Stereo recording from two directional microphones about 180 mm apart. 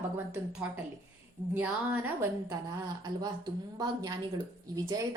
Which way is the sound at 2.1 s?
15° right (ahead or behind).